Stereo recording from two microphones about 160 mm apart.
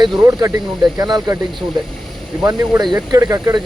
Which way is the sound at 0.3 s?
20° right (ahead or behind).